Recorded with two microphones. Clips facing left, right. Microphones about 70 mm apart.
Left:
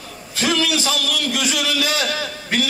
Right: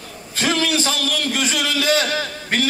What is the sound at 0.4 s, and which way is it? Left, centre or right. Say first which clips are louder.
A man's voice: even; right.